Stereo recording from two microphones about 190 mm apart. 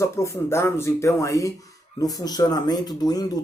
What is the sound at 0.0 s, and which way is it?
Speech, 15° left (ahead or behind).